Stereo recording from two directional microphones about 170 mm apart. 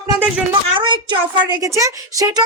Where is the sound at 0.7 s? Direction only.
30° right (ahead or behind).